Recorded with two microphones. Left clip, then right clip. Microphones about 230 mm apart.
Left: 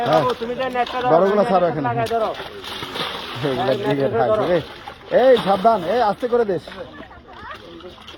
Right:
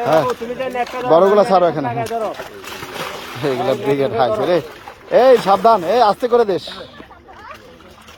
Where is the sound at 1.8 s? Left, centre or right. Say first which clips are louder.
Even; right.